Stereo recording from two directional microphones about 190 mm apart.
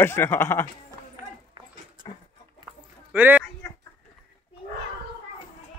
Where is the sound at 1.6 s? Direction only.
25° right (ahead or behind).